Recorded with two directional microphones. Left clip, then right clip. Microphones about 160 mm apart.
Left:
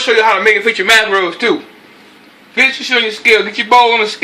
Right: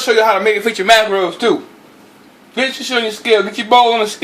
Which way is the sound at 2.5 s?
50° right (ahead or behind).